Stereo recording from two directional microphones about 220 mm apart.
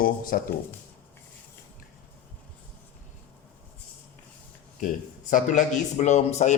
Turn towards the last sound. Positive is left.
turn(degrees=30)  # may be behind; listen again after turning